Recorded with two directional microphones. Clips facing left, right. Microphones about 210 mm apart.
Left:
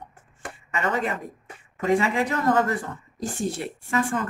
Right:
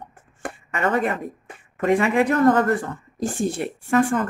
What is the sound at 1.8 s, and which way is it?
Speech, 60° right (ahead or behind).